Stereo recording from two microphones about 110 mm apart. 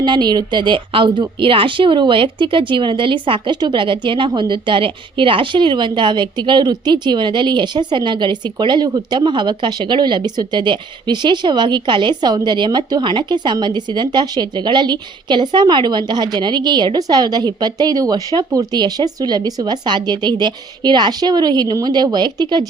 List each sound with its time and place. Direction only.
0.0 s a woman's voice: 40° right (ahead or behind)